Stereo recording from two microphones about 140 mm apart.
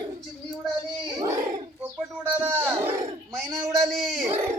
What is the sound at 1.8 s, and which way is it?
A child's voice, 15° right (ahead or behind).